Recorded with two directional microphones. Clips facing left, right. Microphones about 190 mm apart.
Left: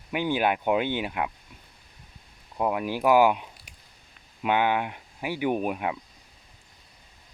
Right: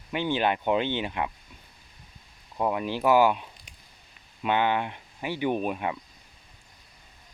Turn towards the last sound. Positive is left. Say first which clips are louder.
# left 1 dB
turn(degrees=10)  # may be behind; listen again after turning